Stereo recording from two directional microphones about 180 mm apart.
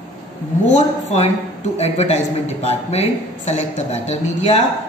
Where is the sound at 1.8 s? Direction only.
35° left (ahead or behind).